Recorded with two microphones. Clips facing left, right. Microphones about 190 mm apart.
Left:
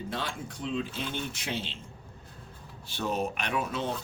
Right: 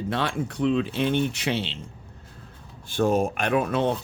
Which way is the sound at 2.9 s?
50° right (ahead or behind).